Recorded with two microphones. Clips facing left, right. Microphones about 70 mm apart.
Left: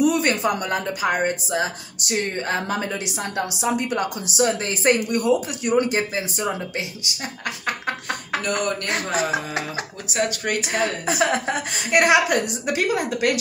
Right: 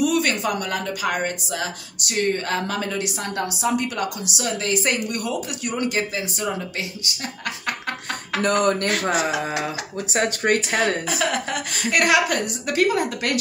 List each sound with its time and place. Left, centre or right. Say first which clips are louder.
0.0 s a woman's voice: left 2 dB; left
8.4 s speech: right 5 dB; right
9.1 s speech: right 1 dB; left
10.0 s speech: right 3 dB; right
11.1 s a woman's voice: left 3 dB; left